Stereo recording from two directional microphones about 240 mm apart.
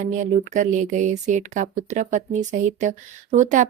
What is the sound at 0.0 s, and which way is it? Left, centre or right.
Speech, right.